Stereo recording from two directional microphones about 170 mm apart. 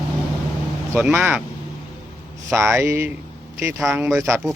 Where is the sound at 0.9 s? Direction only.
10° right (ahead or behind).